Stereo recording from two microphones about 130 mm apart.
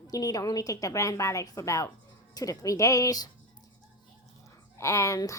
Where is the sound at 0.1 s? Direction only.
30° left (ahead or behind).